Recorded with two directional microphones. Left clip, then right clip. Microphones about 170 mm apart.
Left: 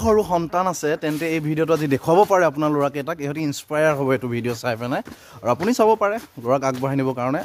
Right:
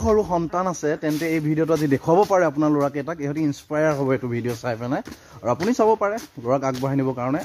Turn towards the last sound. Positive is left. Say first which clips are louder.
# left 1 dB
turn(degrees=15)  # may be behind; listen again after turning